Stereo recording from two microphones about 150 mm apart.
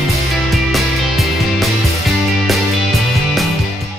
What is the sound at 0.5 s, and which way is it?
Music, centre (ahead or behind).